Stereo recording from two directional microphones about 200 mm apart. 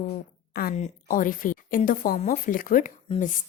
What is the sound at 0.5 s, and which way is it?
Speech, 50° left (ahead or behind).